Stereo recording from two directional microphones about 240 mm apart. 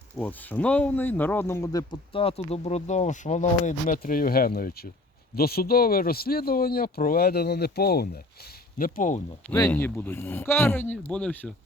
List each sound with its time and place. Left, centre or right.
0.2 s speech: centre; by 9.2 s left
9.5 s speech: centre